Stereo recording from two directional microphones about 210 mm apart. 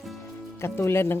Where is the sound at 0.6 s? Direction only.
10° left (ahead or behind).